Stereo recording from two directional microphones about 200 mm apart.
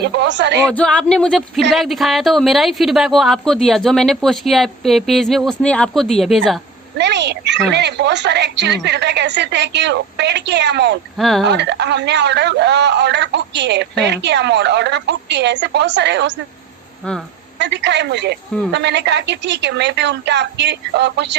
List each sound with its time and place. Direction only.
0.0 s a man's voice: 60° right (ahead or behind)
0.7 s a woman's voice: 5° left (ahead or behind)
7.0 s a sound: 60° right (ahead or behind)
7.7 s a man's voice: 60° right (ahead or behind)
11.2 s a woman's voice: centre (ahead or behind)
11.4 s a man's voice: 60° right (ahead or behind)
17.6 s a man's voice: 60° right (ahead or behind)